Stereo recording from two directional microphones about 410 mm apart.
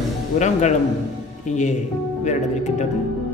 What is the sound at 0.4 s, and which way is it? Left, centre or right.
A man's voice, centre.